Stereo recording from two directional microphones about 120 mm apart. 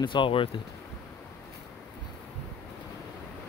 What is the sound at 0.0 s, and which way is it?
Speech, 40° left (ahead or behind).